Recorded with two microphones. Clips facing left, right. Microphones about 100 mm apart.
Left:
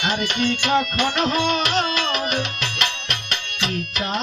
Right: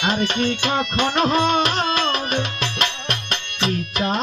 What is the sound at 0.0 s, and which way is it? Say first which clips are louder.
Music: right 2 dB; 35° right (ahead or behind).